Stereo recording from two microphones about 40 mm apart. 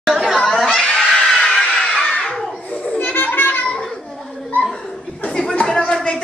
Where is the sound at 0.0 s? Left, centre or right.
Centre.